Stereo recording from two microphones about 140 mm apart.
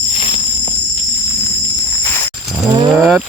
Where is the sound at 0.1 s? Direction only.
45° left (ahead or behind).